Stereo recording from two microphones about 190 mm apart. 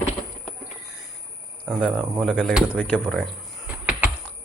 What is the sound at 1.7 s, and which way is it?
Speech, 5° left (ahead or behind).